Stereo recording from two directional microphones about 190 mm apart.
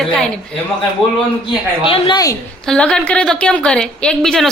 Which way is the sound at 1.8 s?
25° left (ahead or behind).